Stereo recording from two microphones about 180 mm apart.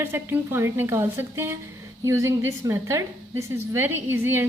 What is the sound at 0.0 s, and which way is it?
A woman's voice, 10° right (ahead or behind).